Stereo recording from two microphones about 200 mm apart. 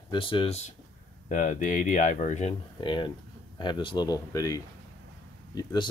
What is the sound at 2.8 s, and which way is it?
Speech, 25° left (ahead or behind).